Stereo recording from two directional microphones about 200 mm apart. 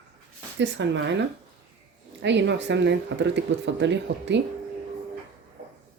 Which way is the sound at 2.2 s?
60° right (ahead or behind).